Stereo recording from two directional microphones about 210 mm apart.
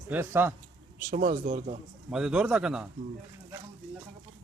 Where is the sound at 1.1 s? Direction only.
35° right (ahead or behind).